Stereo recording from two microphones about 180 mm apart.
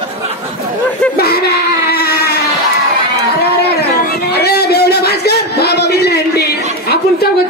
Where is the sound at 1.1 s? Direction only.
60° left (ahead or behind).